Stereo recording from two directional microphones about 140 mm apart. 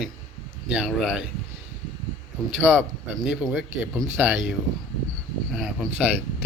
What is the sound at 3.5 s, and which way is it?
Speech, centre (ahead or behind).